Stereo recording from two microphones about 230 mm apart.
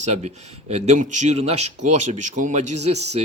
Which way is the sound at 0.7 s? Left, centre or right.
Right.